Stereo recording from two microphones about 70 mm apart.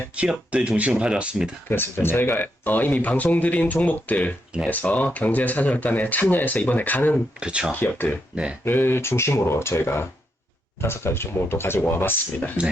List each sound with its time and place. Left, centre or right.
0.2 s speech: centre
1.7 s speech: left
7.3 s speech: centre
7.7 s speech: left